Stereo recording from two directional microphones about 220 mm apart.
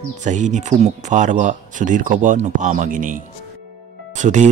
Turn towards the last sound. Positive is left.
turn(degrees=-35)  # may be behind; listen again after turning